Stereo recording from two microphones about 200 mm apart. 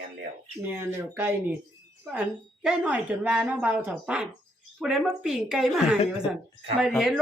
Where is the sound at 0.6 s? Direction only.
10° right (ahead or behind).